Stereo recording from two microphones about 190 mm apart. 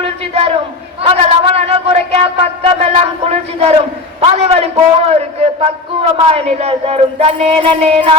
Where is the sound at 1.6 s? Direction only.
30° right (ahead or behind).